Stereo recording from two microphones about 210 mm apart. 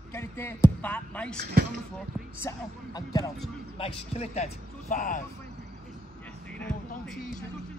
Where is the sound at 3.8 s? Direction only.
30° left (ahead or behind).